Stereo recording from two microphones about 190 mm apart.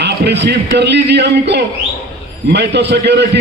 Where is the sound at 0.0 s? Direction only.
65° right (ahead or behind).